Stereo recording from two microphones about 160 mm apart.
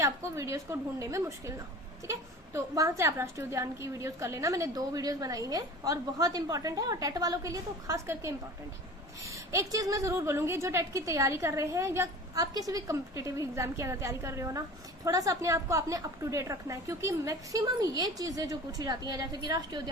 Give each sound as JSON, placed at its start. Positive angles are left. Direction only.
{"t": 0.0, "sound": "a woman's voice", "side_deg": -20}
{"t": 9.3, "sound": "a woman's voice", "side_deg": -20}